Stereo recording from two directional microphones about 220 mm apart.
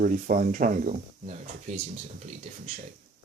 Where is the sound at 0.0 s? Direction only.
40° right (ahead or behind).